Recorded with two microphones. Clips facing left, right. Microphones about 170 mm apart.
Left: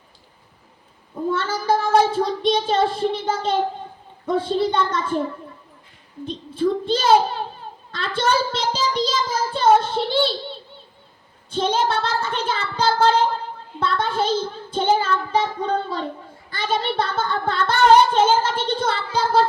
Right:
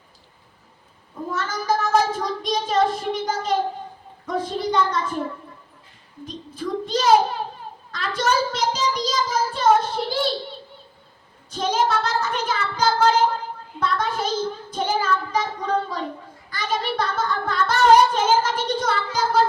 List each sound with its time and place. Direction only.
1.3 s child singing: 30° left (ahead or behind)
4.3 s singing: 30° left (ahead or behind)
6.2 s a child's voice: 30° left (ahead or behind)
7.9 s singing: 30° left (ahead or behind)
11.5 s singing: 30° left (ahead or behind)